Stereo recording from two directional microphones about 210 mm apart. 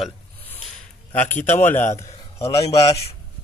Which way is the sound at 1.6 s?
10° left (ahead or behind).